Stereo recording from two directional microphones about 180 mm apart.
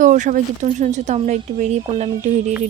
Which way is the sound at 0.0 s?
45° right (ahead or behind).